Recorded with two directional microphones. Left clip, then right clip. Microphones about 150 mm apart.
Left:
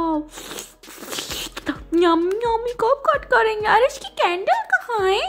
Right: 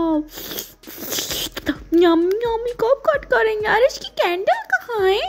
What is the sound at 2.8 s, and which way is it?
A woman's voice, 35° right (ahead or behind).